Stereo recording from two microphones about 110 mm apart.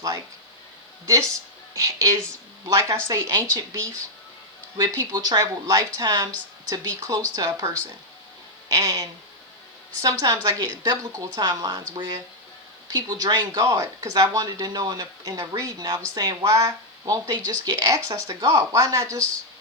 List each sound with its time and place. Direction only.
1.0 s speech: 30° right (ahead or behind)
5.1 s speech: 40° right (ahead or behind)
8.7 s speech: 30° right (ahead or behind)